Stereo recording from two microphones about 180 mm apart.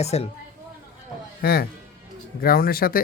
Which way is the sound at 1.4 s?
60° left (ahead or behind).